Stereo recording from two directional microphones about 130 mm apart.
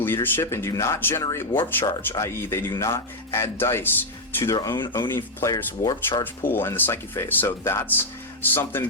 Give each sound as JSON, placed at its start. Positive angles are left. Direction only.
{"t": 0.0, "sound": "speech", "side_deg": 15}
{"t": 4.5, "sound": "speech", "side_deg": 30}
{"t": 6.5, "sound": "speech", "side_deg": 15}